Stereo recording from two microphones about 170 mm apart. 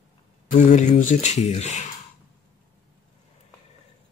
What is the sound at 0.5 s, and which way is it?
Speech, 45° left (ahead or behind).